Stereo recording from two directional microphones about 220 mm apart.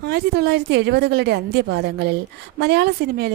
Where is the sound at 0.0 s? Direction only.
50° right (ahead or behind).